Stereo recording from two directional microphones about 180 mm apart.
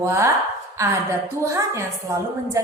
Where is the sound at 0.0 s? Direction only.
15° right (ahead or behind).